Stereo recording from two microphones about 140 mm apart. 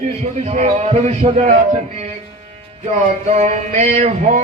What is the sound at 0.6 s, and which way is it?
Speech, 50° right (ahead or behind).